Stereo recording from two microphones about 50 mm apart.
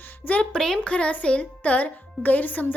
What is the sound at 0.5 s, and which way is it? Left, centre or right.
Speech, centre.